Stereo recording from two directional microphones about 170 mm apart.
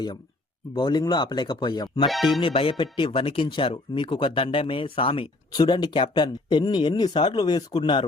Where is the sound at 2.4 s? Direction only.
30° left (ahead or behind).